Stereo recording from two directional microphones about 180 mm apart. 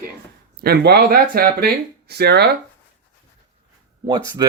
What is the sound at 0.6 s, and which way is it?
Speech, 60° right (ahead or behind).